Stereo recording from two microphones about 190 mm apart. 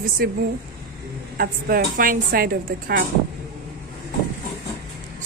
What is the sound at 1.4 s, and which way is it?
A woman's voice, 50° right (ahead or behind).